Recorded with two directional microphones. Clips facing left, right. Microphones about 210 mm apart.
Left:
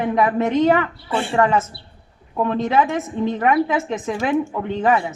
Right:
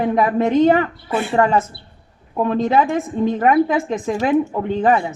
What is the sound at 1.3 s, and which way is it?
A woman's voice, 35° right (ahead or behind).